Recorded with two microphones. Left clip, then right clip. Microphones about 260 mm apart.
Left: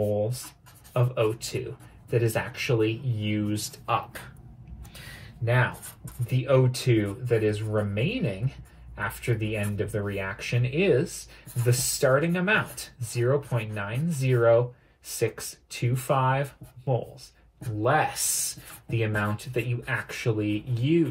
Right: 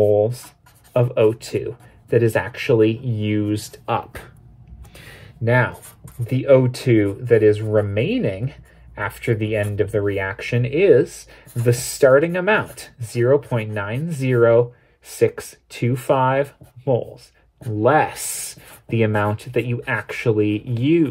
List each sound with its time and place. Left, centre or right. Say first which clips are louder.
0.9 s speech: right 9 dB; right
4.9 s a sound: right 3 dB; right
6.2 s speech: right 9 dB; right